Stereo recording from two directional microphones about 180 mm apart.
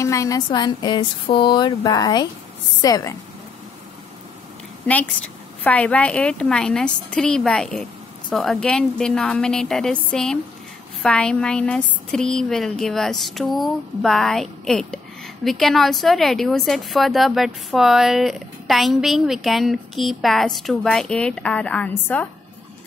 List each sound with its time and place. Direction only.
0.0 s speech: 15° left (ahead or behind)
5.6 s speech: 10° left (ahead or behind)